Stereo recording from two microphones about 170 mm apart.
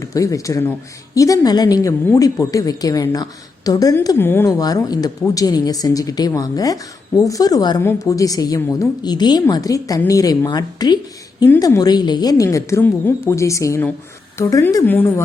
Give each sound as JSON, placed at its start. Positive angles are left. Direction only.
{"t": 0.0, "sound": "a woman's voice", "side_deg": 20}